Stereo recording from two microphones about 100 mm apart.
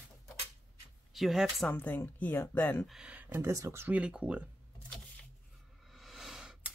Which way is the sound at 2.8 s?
5° right (ahead or behind).